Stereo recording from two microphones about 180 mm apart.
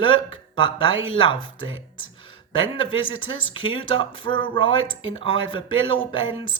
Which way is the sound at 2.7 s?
30° left (ahead or behind).